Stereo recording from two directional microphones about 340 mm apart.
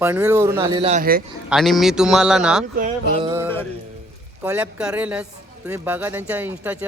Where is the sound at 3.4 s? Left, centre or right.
Centre.